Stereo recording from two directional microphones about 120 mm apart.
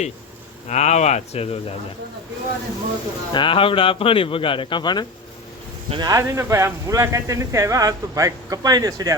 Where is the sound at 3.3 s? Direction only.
45° left (ahead or behind).